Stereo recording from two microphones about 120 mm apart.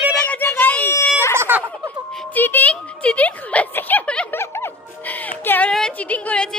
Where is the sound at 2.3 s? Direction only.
15° left (ahead or behind).